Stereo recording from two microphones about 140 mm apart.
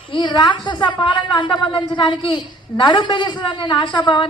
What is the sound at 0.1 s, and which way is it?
A child's voice, 35° left (ahead or behind).